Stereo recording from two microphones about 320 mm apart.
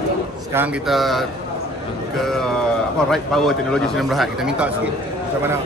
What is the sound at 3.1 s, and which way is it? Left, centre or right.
Speech, centre.